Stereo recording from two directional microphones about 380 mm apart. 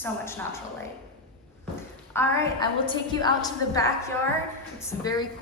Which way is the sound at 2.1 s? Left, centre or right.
Centre.